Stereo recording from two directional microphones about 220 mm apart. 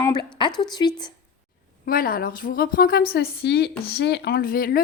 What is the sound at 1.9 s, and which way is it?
A woman's voice, 40° left (ahead or behind).